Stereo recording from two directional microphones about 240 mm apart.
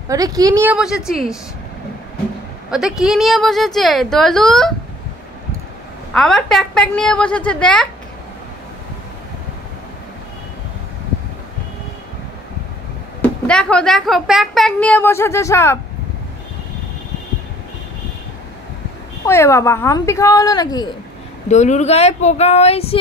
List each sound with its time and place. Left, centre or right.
0.1 s a woman's voice: centre
2.7 s a woman's voice: centre
6.1 s a woman's voice: centre
13.2 s a woman's voice: centre
19.2 s speech: centre
21.5 s speech: left